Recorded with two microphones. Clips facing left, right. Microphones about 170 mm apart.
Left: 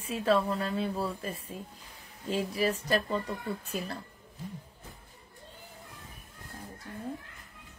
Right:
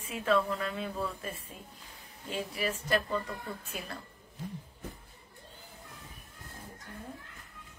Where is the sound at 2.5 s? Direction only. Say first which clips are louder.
Left 1 dB; 35° left (ahead or behind).